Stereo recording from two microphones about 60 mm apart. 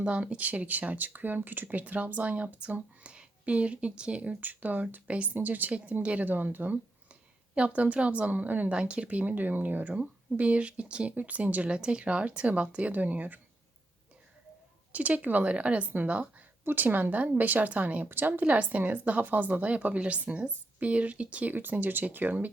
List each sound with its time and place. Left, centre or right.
0.0 s speech: centre
7.5 s speech: right
14.9 s speech: right